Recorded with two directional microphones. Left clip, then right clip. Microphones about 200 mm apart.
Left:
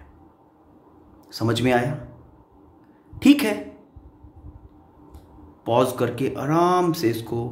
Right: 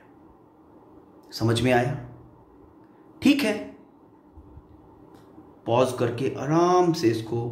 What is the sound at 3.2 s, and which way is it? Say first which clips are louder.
Speech: left 4 dB; 25° left (ahead or behind).